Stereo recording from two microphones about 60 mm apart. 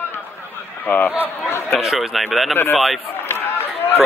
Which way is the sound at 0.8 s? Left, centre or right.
Left.